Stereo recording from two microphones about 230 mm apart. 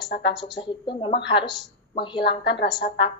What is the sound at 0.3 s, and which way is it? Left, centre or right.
A woman's voice, centre.